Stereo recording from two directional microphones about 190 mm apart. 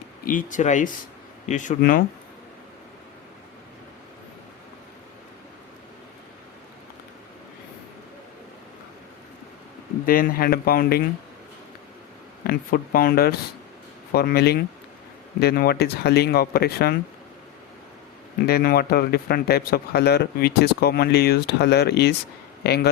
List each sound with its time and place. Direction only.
0.3 s speech: 45° left (ahead or behind)
1.8 s speech: 50° left (ahead or behind)
10.1 s speech: 50° left (ahead or behind)
12.5 s a man's voice: 50° left (ahead or behind)
18.4 s a man's voice: 55° left (ahead or behind)